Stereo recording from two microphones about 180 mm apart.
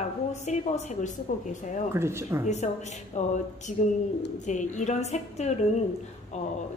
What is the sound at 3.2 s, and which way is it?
Speech, 40° left (ahead or behind).